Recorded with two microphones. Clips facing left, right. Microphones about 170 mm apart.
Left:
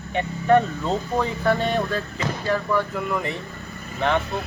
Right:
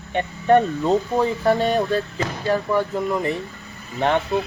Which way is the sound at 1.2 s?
35° right (ahead or behind).